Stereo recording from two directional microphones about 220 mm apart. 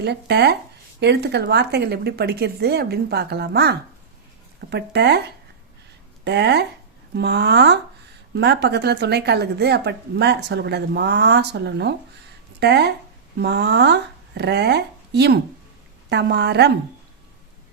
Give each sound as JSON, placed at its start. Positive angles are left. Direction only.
{"t": 0.0, "sound": "a woman's voice", "side_deg": -50}
{"t": 6.2, "sound": "a woman's voice", "side_deg": -50}